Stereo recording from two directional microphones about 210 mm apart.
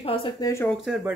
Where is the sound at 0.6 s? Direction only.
Centre (ahead or behind).